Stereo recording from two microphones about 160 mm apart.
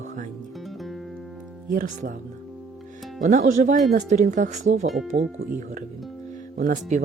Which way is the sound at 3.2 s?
50° right (ahead or behind).